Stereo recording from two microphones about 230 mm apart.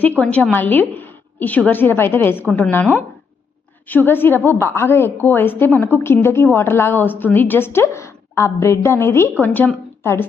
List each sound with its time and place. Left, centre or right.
0.2 s a woman's voice: centre
2.3 s a woman's voice: centre
2.6 s a woman's voice: centre